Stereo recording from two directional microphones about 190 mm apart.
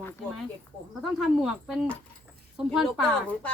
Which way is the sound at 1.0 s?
Centre (ahead or behind).